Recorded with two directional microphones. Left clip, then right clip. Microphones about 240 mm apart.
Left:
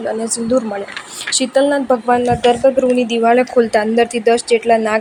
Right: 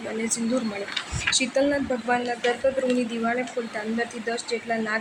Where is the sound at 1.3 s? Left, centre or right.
Left.